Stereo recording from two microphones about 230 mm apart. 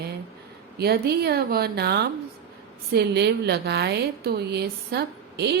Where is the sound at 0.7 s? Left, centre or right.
Right.